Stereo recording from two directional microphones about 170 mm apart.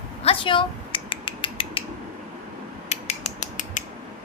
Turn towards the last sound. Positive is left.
turn(degrees=45)  # may be behind; listen again after turning